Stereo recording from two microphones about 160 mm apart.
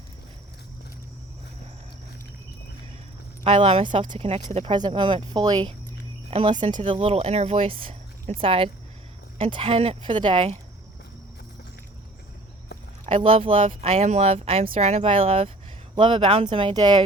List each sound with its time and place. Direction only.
3.4 s speech: 40° right (ahead or behind)
13.1 s speech: 35° right (ahead or behind)
13.8 s speech: 45° right (ahead or behind); by 17.0 s 25° right (ahead or behind)